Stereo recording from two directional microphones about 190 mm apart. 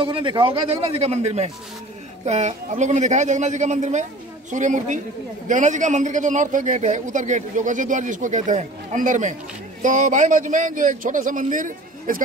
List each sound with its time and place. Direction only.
0.0 s a man's voice: 25° right (ahead or behind); by 12.2 s 45° right (ahead or behind)